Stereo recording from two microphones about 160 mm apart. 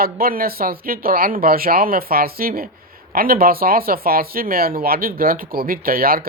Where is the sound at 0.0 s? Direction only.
65° right (ahead or behind).